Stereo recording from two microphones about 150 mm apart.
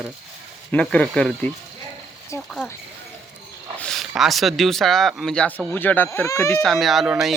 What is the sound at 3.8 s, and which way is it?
Speech, centre (ahead or behind).